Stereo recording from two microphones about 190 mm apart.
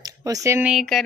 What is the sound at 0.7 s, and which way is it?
Speech, centre (ahead or behind).